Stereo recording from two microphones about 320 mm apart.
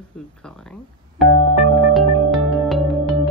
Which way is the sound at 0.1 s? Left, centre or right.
Centre.